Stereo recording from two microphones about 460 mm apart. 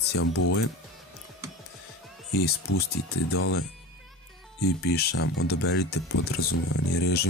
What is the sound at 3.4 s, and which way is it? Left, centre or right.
Speech, left.